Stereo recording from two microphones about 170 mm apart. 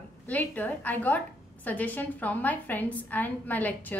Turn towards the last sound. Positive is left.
turn(degrees=10)  # may be behind; listen again after turning